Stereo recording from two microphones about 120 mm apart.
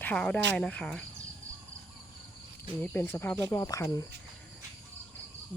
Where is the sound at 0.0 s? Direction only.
10° left (ahead or behind).